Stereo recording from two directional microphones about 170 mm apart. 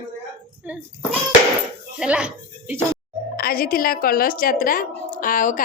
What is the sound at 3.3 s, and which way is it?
A woman's voice, 60° left (ahead or behind).